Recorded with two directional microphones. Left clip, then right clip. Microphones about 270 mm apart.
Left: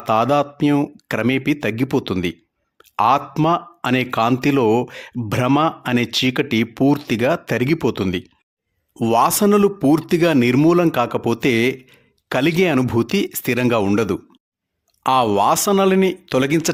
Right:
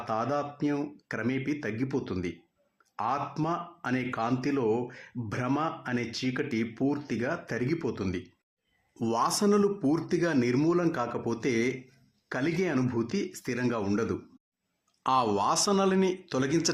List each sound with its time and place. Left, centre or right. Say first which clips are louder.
0.1 s speech: left 14 dB; left